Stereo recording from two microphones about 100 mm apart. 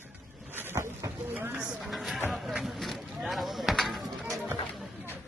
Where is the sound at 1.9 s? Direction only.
Centre (ahead or behind).